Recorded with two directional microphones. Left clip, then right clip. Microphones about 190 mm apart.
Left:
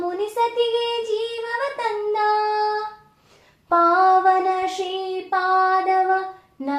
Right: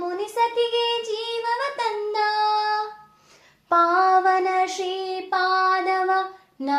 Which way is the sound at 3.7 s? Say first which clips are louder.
Left 2 dB; 20° right (ahead or behind).